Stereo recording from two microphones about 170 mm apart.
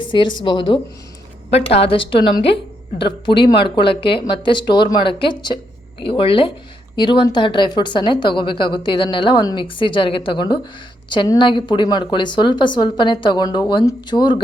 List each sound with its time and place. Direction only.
0.0 s a woman's voice: 25° left (ahead or behind)